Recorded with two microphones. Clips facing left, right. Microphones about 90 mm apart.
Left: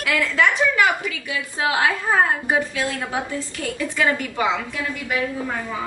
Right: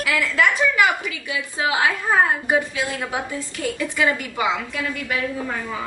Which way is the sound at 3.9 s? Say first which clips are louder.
Left 2 dB; 5° right (ahead or behind).